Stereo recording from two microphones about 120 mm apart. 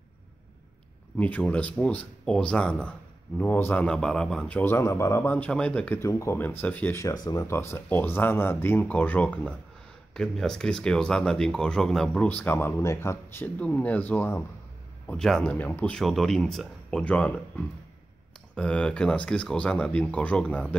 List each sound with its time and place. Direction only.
1.1 s speech: 10° left (ahead or behind)
3.8 s speech: 5° left (ahead or behind)
5.9 s speech: 25° left (ahead or behind)
7.4 s speech: 20° left (ahead or behind)
15.0 s speech: 5° left (ahead or behind)
15.5 s speech: 15° left (ahead or behind)